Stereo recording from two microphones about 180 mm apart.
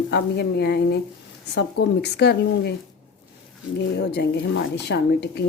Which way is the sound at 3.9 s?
65° left (ahead or behind).